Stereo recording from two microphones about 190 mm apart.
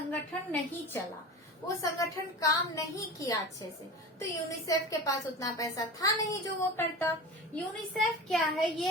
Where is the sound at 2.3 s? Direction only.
15° left (ahead or behind).